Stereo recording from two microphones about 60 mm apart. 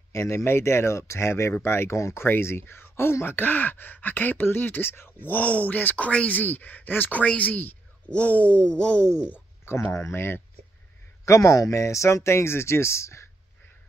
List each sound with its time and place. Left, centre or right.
0.1 s speech: left
5.4 s speech: left
9.0 s speech: left
9.9 s speech: left
11.2 s speech: left